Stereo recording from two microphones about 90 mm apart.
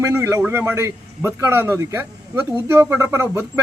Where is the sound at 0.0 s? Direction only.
30° right (ahead or behind).